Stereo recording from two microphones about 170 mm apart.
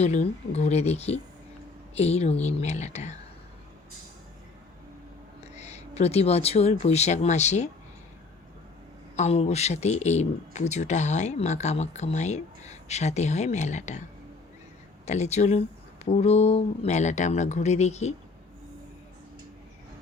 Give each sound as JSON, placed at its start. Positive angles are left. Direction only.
{"t": 0.0, "sound": "speech", "side_deg": 40}
{"t": 5.4, "sound": "speech", "side_deg": 40}
{"t": 9.1, "sound": "speech", "side_deg": 40}
{"t": 15.0, "sound": "speech", "side_deg": 40}